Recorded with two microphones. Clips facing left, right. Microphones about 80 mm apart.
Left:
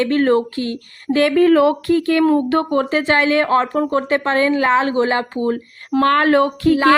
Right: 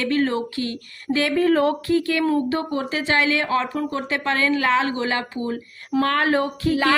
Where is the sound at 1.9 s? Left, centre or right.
Left.